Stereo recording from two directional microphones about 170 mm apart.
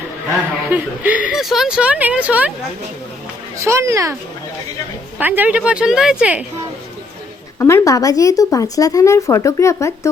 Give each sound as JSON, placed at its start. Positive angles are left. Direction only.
{"t": 0.7, "sound": "speech", "side_deg": -10}
{"t": 3.6, "sound": "speech", "side_deg": -15}
{"t": 5.2, "sound": "speech", "side_deg": -10}
{"t": 7.6, "sound": "speech", "side_deg": 15}